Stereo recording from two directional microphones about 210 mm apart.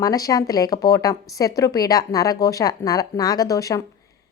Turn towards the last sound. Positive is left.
turn(degrees=15)  # may be behind; listen again after turning